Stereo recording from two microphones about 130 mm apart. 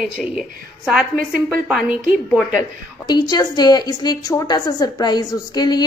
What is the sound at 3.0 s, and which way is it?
A woman's voice, 30° left (ahead or behind).